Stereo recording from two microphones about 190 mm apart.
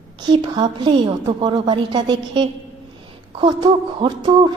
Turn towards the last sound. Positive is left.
turn(degrees=-25)  # may be behind; listen again after turning